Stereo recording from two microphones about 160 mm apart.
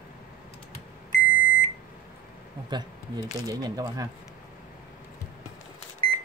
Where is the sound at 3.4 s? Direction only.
20° right (ahead or behind).